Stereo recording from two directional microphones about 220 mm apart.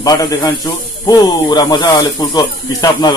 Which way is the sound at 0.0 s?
15° left (ahead or behind).